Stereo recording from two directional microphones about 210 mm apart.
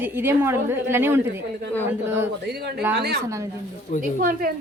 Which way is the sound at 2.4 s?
50° right (ahead or behind).